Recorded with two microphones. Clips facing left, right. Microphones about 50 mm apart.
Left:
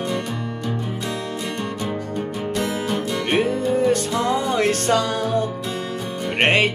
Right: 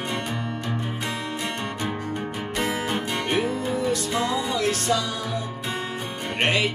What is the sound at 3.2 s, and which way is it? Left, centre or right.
Music, left.